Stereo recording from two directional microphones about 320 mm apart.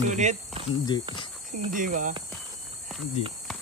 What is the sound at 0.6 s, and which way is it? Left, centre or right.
Speech, centre.